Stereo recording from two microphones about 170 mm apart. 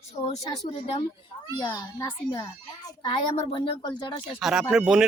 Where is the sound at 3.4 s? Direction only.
30° left (ahead or behind).